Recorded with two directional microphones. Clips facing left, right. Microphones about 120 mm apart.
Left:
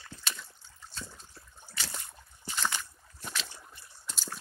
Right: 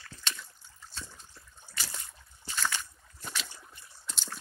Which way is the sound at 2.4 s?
15° left (ahead or behind).